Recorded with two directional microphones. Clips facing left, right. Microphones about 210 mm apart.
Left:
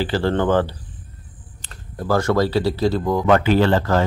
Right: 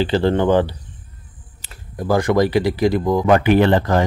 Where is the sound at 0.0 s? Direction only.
20° right (ahead or behind).